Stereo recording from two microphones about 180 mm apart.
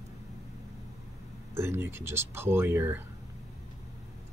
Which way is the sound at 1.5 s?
15° right (ahead or behind).